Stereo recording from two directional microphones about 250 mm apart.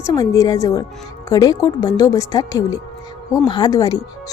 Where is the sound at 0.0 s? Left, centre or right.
Centre.